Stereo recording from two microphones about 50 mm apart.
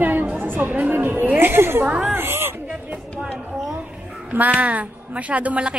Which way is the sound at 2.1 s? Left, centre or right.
Right.